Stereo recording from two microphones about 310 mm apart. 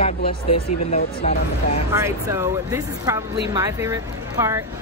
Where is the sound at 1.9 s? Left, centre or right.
Centre.